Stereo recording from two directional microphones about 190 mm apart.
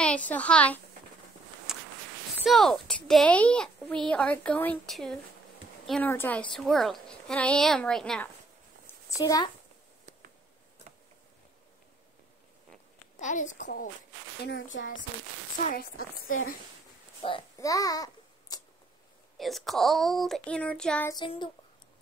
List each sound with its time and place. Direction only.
0.3 s a woman's voice: 5° left (ahead or behind)
1.7 s a sound: centre (ahead or behind)
2.4 s a woman's voice: centre (ahead or behind)
8.8 s a sound: 20° left (ahead or behind)
13.2 s a woman's voice: 40° left (ahead or behind)
14.4 s speech: 75° left (ahead or behind)
15.5 s speech: 45° left (ahead or behind)
17.2 s a child's voice: 30° left (ahead or behind)
17.6 s babbling: 15° left (ahead or behind)
19.3 s speech: centre (ahead or behind)
21.1 s a child's voice: 25° left (ahead or behind)